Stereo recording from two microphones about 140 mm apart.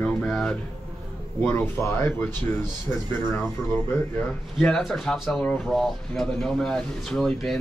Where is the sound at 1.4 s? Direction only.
15° left (ahead or behind).